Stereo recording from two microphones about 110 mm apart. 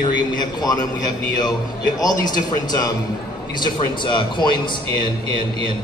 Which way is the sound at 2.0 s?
40° left (ahead or behind).